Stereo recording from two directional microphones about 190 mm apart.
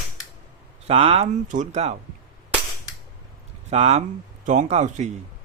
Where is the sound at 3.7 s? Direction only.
35° right (ahead or behind).